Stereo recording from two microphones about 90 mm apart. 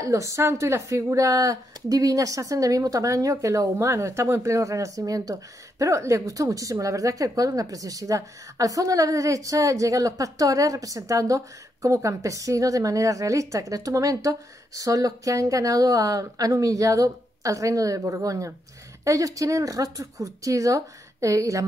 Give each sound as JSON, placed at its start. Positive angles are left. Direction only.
{"t": 0.0, "sound": "a woman's voice", "side_deg": -35}